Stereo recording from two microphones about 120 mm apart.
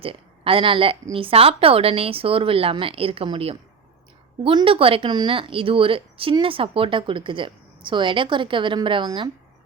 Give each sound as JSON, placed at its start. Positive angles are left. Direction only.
{"t": 0.0, "sound": "a woman's voice", "side_deg": -50}